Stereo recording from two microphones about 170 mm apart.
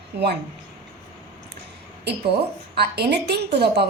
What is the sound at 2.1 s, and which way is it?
A woman's voice, 75° right (ahead or behind).